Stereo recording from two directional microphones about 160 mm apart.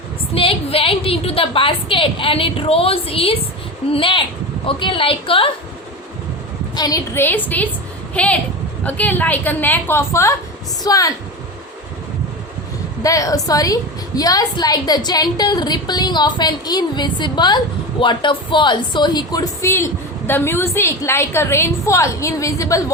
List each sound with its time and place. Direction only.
0.3 s a woman's voice: 35° left (ahead or behind)
6.7 s a woman's voice: 25° left (ahead or behind)
13.0 s a woman's voice: 20° left (ahead or behind)